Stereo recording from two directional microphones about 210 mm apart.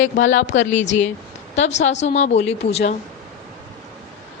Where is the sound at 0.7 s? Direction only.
35° left (ahead or behind).